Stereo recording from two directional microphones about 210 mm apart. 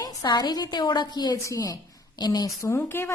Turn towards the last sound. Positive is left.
turn(degrees=10)  # may be behind; listen again after turning